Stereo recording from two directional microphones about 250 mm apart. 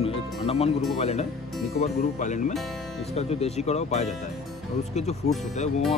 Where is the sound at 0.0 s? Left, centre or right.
Left.